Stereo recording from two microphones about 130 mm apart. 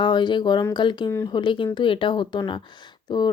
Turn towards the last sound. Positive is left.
turn(degrees=35)  # may be behind; listen again after turning